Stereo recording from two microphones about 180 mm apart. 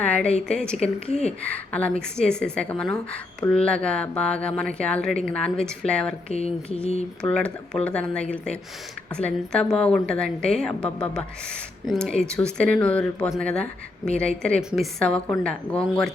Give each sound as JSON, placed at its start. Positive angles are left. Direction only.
{"t": 0.0, "sound": "a woman's voice", "side_deg": 5}
{"t": 6.3, "sound": "mantra", "side_deg": 35}
{"t": 7.2, "sound": "a woman's voice", "side_deg": 5}